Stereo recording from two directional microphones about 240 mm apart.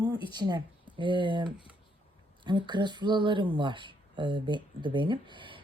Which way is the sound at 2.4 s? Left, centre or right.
Centre.